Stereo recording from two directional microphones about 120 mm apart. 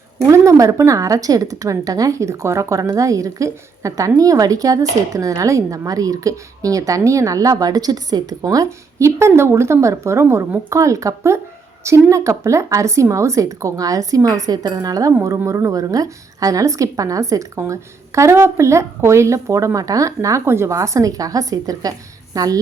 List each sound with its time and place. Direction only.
0.3 s speech: 25° right (ahead or behind)